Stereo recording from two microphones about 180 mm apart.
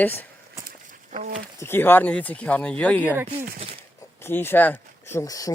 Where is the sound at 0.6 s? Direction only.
50° right (ahead or behind).